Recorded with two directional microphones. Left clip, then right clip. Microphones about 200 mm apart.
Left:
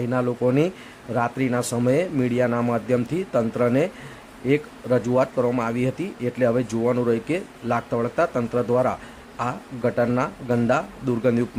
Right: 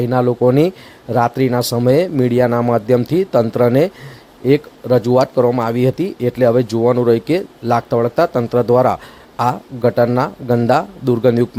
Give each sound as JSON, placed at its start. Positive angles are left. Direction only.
{"t": 0.0, "sound": "speech", "side_deg": -30}